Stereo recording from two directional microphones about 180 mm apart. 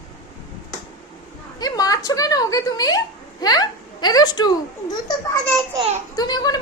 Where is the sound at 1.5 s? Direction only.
20° left (ahead or behind).